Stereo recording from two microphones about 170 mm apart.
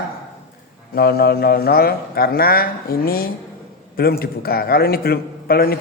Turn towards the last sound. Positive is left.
turn(degrees=65)  # may be behind; listen again after turning